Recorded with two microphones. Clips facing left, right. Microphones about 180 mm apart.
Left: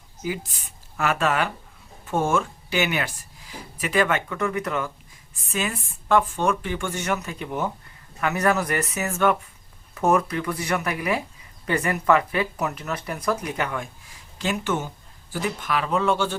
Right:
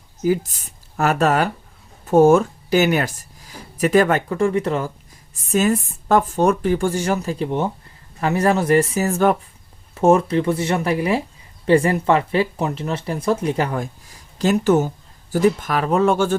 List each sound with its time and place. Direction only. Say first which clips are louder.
0.2 s speech: right 10 dB; 40° right (ahead or behind)
5.3 s speech: right 10 dB; 40° right (ahead or behind)